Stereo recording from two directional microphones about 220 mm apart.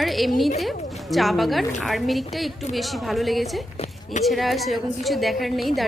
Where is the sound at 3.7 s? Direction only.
30° left (ahead or behind).